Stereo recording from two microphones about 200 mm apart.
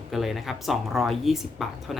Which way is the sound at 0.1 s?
Centre (ahead or behind).